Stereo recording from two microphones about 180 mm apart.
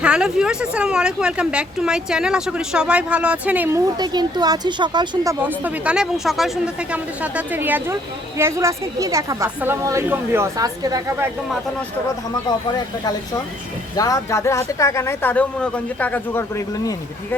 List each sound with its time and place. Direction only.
0.0 s speech: 5° right (ahead or behind)
3.9 s a woman's voice: 25° right (ahead or behind)
12.5 s speech: 20° left (ahead or behind)